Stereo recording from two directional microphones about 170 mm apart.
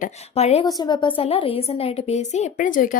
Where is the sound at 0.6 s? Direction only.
25° left (ahead or behind); by 2.9 s 50° left (ahead or behind).